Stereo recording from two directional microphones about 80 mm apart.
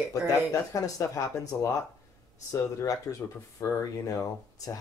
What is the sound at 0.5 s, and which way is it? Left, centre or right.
Speech, left.